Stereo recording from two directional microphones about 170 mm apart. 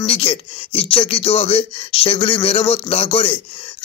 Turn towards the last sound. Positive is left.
turn(degrees=35)  # may be behind; listen again after turning